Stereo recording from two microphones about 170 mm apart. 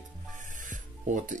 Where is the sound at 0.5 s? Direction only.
50° right (ahead or behind).